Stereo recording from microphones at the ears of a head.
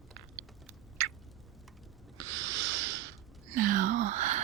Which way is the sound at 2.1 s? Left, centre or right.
Right.